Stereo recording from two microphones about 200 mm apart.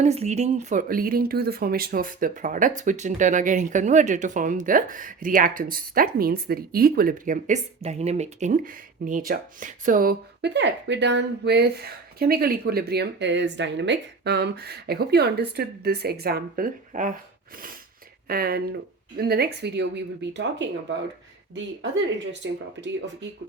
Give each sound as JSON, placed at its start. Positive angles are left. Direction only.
{"t": 0.0, "sound": "speech", "side_deg": -35}
{"t": 18.3, "sound": "speech", "side_deg": -50}